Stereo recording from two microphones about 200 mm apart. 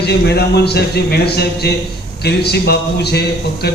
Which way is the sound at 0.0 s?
55° left (ahead or behind).